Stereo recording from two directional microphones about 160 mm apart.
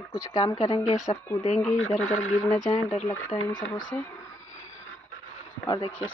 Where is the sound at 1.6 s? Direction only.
5° left (ahead or behind).